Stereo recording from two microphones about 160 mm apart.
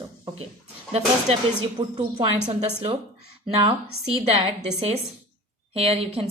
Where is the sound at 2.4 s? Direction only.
45° right (ahead or behind).